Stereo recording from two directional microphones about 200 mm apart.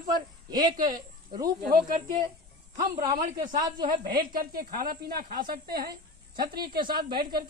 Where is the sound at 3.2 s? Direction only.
40° right (ahead or behind).